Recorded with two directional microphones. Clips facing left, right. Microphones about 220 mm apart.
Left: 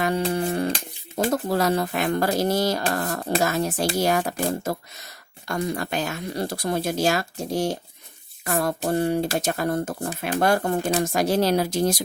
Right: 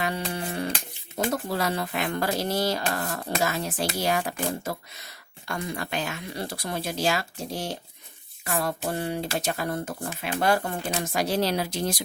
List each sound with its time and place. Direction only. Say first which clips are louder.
0.3 s music: left 6 dB; 45° left (ahead or behind)
1.1 s speech: left 5 dB; 45° left (ahead or behind)